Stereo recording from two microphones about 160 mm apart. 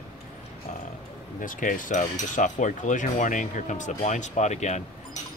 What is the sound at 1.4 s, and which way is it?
Cutlery, 55° left (ahead or behind).